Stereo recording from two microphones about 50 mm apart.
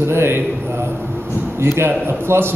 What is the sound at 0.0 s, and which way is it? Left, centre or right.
Speech, right.